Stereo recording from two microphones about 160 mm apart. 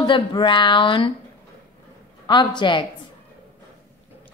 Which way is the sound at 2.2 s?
30° left (ahead or behind).